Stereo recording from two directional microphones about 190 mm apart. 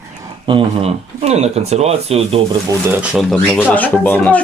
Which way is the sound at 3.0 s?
Centre (ahead or behind).